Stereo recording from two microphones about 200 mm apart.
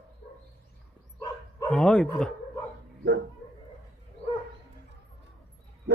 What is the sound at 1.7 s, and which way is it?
Speech, 5° left (ahead or behind).